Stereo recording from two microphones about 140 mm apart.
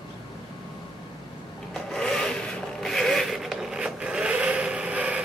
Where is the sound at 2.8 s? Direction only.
Centre (ahead or behind).